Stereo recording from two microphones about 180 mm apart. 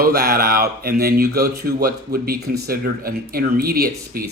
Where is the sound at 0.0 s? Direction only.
60° right (ahead or behind).